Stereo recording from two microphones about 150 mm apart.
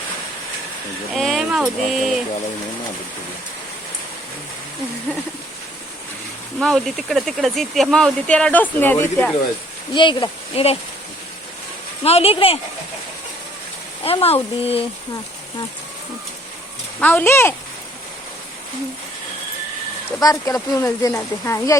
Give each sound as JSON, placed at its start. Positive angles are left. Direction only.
{"t": 1.1, "sound": "a sound", "side_deg": 0}
{"t": 1.9, "sound": "speech", "side_deg": 0}
{"t": 6.6, "sound": "speech", "side_deg": 0}
{"t": 9.9, "sound": "speech", "side_deg": 30}
{"t": 12.0, "sound": "speech", "side_deg": 40}
{"t": 14.0, "sound": "speech", "side_deg": 40}
{"t": 17.0, "sound": "speech", "side_deg": 10}
{"t": 20.2, "sound": "speech", "side_deg": 20}